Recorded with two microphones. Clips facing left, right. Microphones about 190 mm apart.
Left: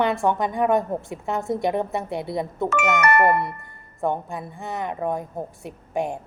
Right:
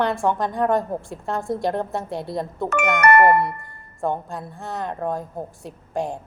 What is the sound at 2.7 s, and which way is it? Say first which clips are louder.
Speech: right 4 dB; 55° right (ahead or behind).